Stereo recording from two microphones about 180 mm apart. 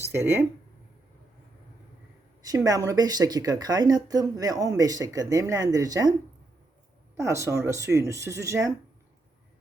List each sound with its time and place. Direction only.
0.0 s speech: 15° right (ahead or behind)
2.4 s speech: 20° right (ahead or behind)
7.2 s speech: 15° right (ahead or behind)